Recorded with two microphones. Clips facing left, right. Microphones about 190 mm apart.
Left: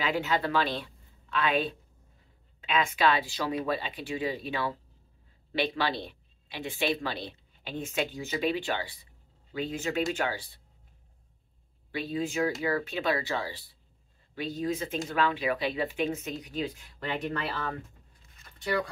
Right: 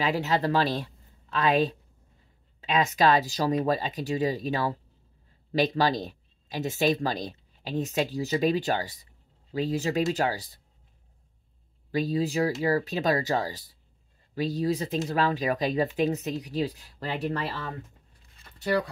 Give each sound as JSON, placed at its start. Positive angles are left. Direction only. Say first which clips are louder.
{"t": 0.0, "sound": "a woman's voice", "louder": "right 3 dB", "side_deg": -35}
{"t": 11.9, "sound": "speech", "louder": "right 5 dB", "side_deg": -40}
{"t": 18.3, "sound": "a sound", "louder": "right 4 dB", "side_deg": -35}